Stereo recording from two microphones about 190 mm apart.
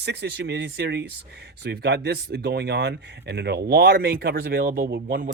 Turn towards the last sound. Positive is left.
turn(degrees=-50)  # may be behind; listen again after turning